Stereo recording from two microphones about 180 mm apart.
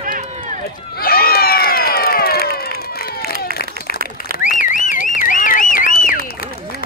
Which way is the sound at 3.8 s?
55° right (ahead or behind).